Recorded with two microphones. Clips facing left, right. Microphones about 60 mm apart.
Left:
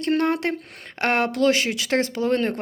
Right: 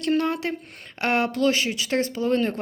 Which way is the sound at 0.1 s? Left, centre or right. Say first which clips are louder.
Left 2 dB; left.